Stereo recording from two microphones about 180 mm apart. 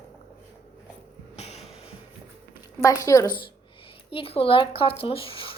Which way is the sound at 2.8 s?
15° left (ahead or behind).